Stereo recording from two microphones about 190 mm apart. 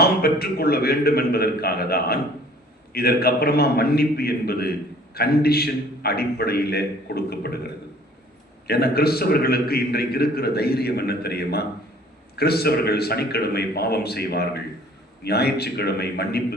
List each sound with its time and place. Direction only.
0.0 s a man's voice: 55° left (ahead or behind)